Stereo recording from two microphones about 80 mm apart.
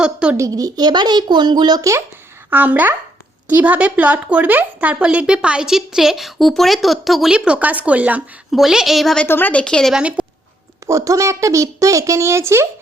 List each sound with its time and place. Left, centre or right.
0.0 s a woman's voice: centre
0.3 s speech: right
2.5 s a woman's voice: right
8.5 s a woman's voice: centre
9.2 s a woman's voice: left
9.9 s a woman's voice: centre
10.8 s a woman's voice: right